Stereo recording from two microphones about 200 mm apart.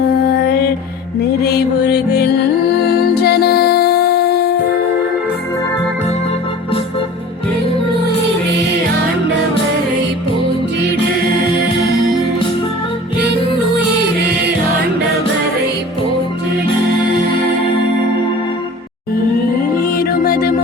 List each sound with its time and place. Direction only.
0.3 s music: 55° left (ahead or behind)
2.9 s music: 50° left (ahead or behind)
19.8 s music: 50° left (ahead or behind)